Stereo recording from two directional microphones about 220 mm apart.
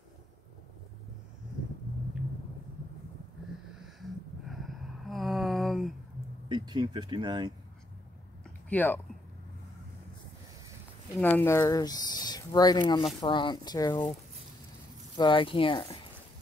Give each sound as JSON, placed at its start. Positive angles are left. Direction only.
{"t": 3.8, "sound": "a sound", "side_deg": 0}
{"t": 6.5, "sound": "speech", "side_deg": -20}
{"t": 8.6, "sound": "speech", "side_deg": 10}
{"t": 11.1, "sound": "speech", "side_deg": 10}
{"t": 15.1, "sound": "speech", "side_deg": 20}